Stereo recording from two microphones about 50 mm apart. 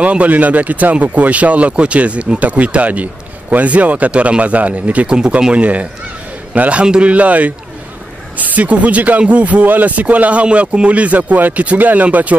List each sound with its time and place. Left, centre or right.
0.0 s speech: right